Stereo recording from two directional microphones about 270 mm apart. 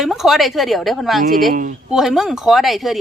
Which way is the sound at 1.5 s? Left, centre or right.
Right.